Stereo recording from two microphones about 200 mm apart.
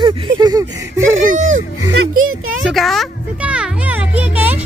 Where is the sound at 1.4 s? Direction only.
35° right (ahead or behind).